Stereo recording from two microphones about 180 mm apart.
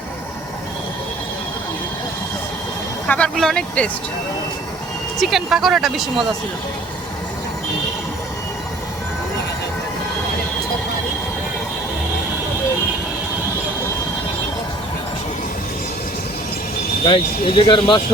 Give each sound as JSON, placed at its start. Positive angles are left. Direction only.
{"t": 3.1, "sound": "speech", "side_deg": 5}
{"t": 5.2, "sound": "speech", "side_deg": 0}
{"t": 17.1, "sound": "speech", "side_deg": 30}